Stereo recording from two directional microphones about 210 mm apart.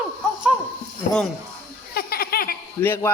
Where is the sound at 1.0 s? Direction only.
40° left (ahead or behind).